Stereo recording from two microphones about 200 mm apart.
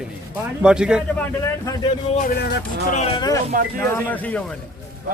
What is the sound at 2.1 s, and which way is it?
Speech, 45° left (ahead or behind).